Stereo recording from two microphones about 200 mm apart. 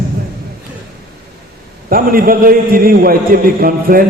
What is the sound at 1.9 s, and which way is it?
A man's voice, 45° right (ahead or behind).